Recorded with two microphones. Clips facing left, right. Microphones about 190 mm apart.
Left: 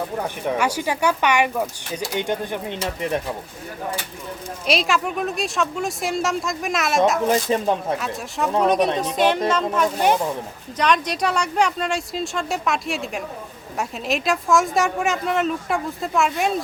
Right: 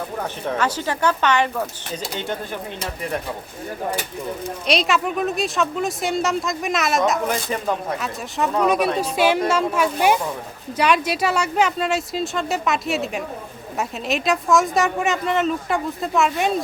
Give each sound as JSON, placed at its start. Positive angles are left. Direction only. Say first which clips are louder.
{"t": 0.2, "sound": "speech", "louder": "even", "side_deg": 10}
{"t": 4.6, "sound": "a woman's voice", "louder": "right 1 dB", "side_deg": 0}
{"t": 7.3, "sound": "speech", "louder": "left 4 dB", "side_deg": 25}
{"t": 7.9, "sound": "a woman's voice", "louder": "even", "side_deg": 0}